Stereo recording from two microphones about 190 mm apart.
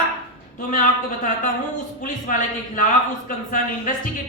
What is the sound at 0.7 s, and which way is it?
Speech, 45° left (ahead or behind).